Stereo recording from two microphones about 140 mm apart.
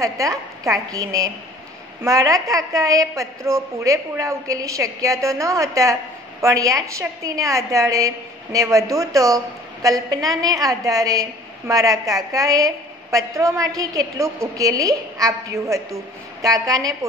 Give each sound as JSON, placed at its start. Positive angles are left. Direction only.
{"t": 0.0, "sound": "a woman's voice", "side_deg": -25}